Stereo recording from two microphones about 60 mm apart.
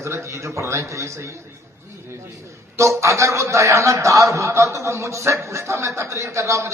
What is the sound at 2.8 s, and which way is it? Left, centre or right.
A man's voice, right.